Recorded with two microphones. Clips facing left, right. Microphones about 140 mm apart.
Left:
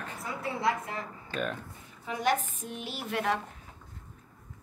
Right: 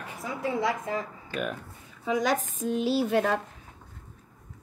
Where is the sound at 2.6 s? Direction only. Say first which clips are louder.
Right 12 dB; 90° right.